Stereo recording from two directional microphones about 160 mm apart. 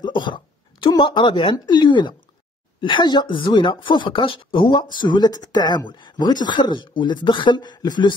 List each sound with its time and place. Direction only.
0.0 s speech: 30° left (ahead or behind)